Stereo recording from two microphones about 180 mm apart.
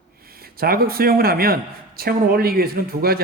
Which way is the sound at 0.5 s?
55° right (ahead or behind).